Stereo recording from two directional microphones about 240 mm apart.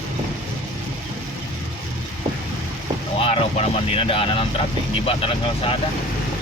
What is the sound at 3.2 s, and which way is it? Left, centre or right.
Speech, left.